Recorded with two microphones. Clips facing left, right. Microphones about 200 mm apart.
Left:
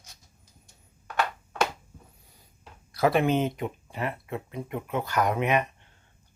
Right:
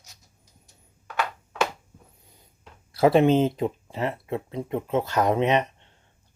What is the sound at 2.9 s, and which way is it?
Speech, 30° right (ahead or behind).